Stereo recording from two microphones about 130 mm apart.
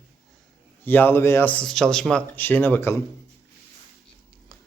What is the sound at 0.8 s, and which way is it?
Speech, 15° left (ahead or behind).